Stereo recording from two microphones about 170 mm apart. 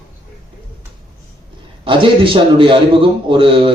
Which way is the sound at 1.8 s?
30° right (ahead or behind).